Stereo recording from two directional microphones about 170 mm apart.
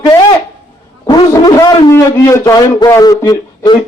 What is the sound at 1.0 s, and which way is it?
A man's voice, 20° left (ahead or behind).